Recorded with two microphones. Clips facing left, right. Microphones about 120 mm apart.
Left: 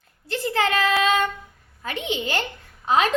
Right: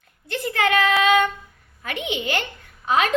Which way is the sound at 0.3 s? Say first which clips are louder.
Right 1 dB; 30° left (ahead or behind).